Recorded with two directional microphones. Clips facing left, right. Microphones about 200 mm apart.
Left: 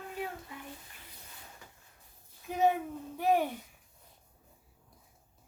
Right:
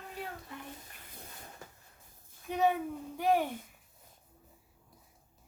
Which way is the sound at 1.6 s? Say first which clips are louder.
Right 4 dB; 45° right (ahead or behind).